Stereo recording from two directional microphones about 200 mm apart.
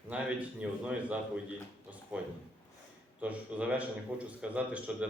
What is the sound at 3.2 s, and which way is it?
Speech, 5° right (ahead or behind).